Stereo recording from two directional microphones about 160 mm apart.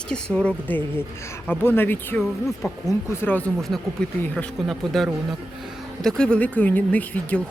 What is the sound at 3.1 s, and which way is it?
Speech, 15° left (ahead or behind).